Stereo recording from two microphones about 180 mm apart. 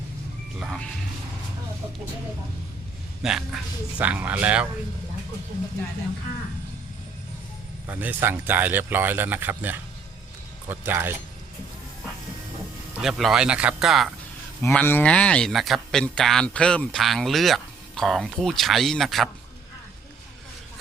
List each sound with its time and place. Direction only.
0.6 s a man's voice: centre (ahead or behind)
3.2 s speech: 5° right (ahead or behind)
7.9 s speech: 10° right (ahead or behind)
13.0 s a man's voice: centre (ahead or behind)
14.6 s a man's voice: 10° left (ahead or behind)